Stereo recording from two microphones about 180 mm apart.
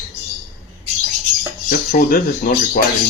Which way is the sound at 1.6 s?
50° left (ahead or behind).